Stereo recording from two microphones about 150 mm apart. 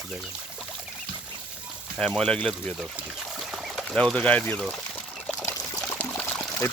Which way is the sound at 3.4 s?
Centre (ahead or behind).